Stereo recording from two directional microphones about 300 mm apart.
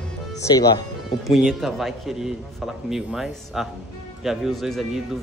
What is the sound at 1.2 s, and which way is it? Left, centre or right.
A man's voice, centre.